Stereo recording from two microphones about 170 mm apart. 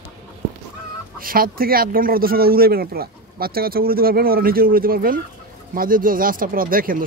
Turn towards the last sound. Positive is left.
turn(degrees=-55)  # may be behind; listen again after turning